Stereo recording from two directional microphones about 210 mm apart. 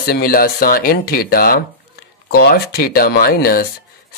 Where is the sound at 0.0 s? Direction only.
45° left (ahead or behind).